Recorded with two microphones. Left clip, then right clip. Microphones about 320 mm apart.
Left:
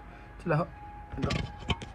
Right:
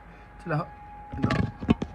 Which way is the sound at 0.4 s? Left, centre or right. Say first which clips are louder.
Left 1 dB; centre.